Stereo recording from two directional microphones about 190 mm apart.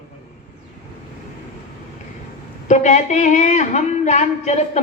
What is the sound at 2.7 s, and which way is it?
A man's voice, 40° left (ahead or behind).